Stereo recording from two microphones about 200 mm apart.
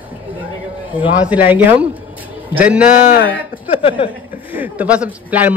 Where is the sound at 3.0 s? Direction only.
45° left (ahead or behind).